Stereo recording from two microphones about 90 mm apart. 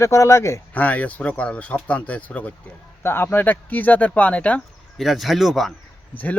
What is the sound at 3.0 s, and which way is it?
Speech, 25° left (ahead or behind).